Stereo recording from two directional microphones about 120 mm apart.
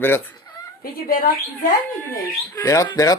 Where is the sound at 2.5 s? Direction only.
30° left (ahead or behind).